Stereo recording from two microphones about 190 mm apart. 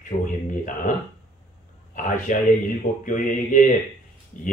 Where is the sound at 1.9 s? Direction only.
45° left (ahead or behind).